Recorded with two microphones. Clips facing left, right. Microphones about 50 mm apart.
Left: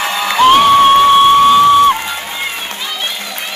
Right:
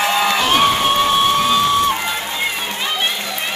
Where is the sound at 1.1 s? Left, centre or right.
Left.